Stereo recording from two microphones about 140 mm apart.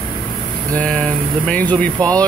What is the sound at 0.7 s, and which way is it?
Speech, 5° left (ahead or behind).